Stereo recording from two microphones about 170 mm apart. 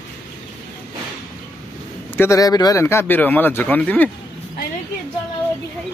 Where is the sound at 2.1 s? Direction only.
15° left (ahead or behind).